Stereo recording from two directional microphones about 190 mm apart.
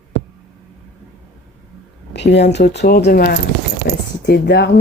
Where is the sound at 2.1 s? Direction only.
65° left (ahead or behind).